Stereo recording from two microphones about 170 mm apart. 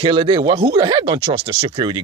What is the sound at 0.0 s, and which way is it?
Speech, 35° right (ahead or behind).